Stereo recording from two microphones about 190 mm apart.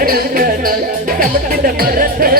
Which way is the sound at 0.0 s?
50° right (ahead or behind).